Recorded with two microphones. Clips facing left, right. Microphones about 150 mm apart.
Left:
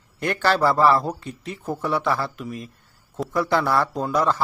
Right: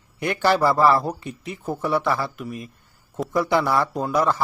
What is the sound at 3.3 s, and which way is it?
A man's voice, 15° right (ahead or behind).